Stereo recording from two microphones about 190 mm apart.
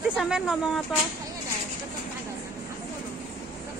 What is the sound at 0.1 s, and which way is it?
Speech, 5° right (ahead or behind).